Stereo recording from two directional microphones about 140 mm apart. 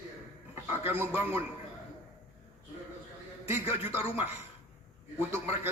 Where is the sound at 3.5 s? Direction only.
15° right (ahead or behind).